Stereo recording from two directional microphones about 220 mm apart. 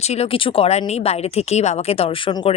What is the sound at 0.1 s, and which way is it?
Speech, 25° left (ahead or behind).